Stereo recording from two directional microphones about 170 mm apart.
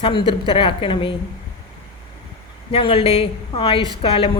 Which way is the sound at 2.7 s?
30° left (ahead or behind).